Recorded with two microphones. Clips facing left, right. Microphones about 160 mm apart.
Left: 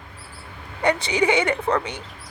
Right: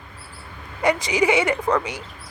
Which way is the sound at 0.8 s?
30° left (ahead or behind).